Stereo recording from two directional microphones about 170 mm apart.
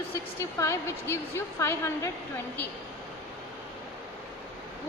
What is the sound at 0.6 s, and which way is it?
A woman's voice, 15° left (ahead or behind).